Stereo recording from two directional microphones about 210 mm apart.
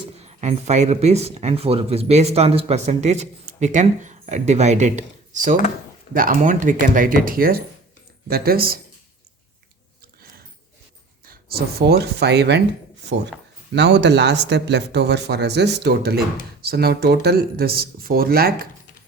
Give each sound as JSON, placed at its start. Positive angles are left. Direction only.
{"t": 0.3, "sound": "speech", "side_deg": -35}
{"t": 11.3, "sound": "speech", "side_deg": -45}
{"t": 13.7, "sound": "speech", "side_deg": -55}